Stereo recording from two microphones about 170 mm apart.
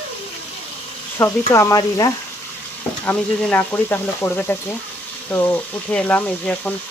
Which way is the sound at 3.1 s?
10° left (ahead or behind).